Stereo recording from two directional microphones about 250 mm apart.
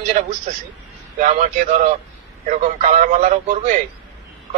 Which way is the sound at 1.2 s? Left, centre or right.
Right.